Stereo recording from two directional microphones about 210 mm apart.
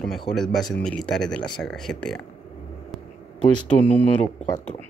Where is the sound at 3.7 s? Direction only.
15° left (ahead or behind).